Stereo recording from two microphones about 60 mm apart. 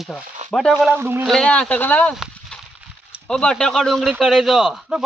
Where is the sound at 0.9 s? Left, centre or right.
Right.